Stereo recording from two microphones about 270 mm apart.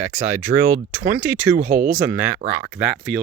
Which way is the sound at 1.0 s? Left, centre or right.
Centre.